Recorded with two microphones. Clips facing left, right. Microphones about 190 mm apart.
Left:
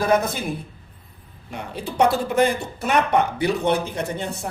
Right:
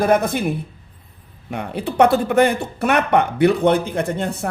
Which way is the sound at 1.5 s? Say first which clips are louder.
Right 6 dB; 60° right (ahead or behind).